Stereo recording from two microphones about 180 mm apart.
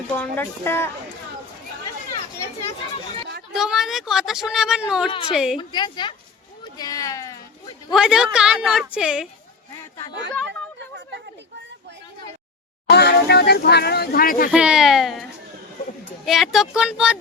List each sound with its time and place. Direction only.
0.1 s speech: 10° left (ahead or behind)
3.5 s speech: 5° right (ahead or behind)
5.0 s a woman's voice: 30° left (ahead or behind)
5.3 s speech: 5° right (ahead or behind)
5.5 s a woman's voice: 25° left (ahead or behind)
6.7 s a sound: 20° left (ahead or behind)
7.9 s speech: 5° right (ahead or behind)
12.9 s speech: 65° left (ahead or behind)
14.5 s speech: 5° right (ahead or behind)